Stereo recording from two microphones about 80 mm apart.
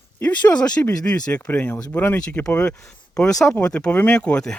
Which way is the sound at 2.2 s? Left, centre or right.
Centre.